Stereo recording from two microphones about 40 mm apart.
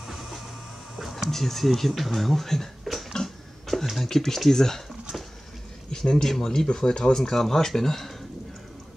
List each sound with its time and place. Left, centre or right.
0.0 s vehicle: centre
1.0 s a sound: centre
1.3 s speech: centre
3.1 s a sound: centre
3.9 s speech: centre
5.9 s speech: left